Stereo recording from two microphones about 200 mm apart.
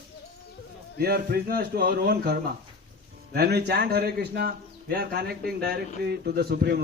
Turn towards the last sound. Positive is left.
turn(degrees=-50)  # may be behind; listen again after turning